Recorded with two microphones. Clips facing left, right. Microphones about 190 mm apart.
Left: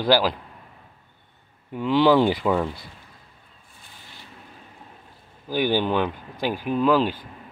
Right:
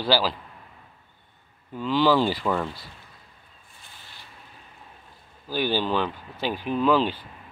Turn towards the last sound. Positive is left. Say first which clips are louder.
# left 2 dB
turn(degrees=10)  # may be behind; listen again after turning